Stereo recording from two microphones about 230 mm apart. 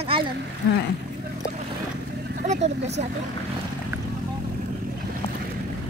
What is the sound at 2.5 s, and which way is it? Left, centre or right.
Speech, right.